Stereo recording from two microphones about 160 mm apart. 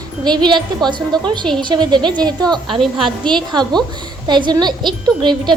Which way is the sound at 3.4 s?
25° right (ahead or behind).